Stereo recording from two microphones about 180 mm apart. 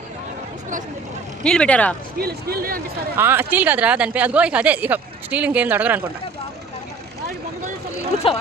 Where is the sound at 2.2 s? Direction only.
60° right (ahead or behind).